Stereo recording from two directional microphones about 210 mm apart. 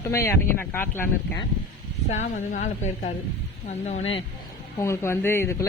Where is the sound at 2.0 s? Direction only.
35° left (ahead or behind).